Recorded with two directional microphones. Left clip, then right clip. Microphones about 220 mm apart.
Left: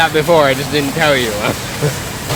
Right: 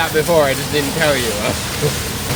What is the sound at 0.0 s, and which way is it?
Speech, 40° left (ahead or behind).